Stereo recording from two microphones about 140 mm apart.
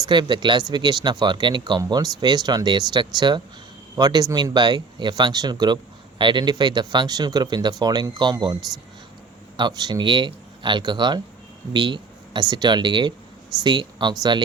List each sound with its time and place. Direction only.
0.0 s speech: 35° right (ahead or behind)
9.6 s speech: 30° right (ahead or behind)